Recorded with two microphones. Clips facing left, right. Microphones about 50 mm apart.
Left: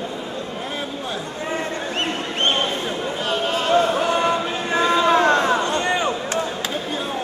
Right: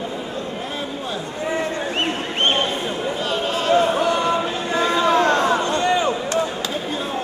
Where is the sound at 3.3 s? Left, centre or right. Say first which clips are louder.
Left 1 dB; left.